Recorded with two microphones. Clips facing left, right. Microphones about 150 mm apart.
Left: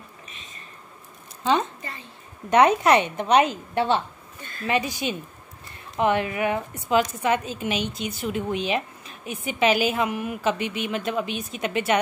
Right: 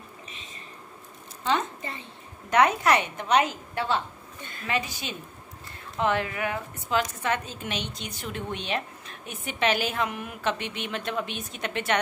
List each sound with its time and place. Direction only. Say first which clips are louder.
1.5 s a woman's voice: left 4 dB; 15° left (ahead or behind)
1.8 s a child's voice: right 1 dB; 20° right (ahead or behind)
2.5 s a woman's voice: left 4 dB; 20° left (ahead or behind)